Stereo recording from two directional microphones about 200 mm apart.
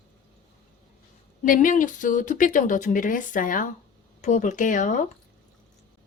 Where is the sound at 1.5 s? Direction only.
40° left (ahead or behind).